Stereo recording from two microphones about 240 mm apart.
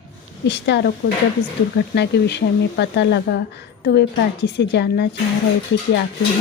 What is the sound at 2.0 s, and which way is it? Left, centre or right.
Speech, left.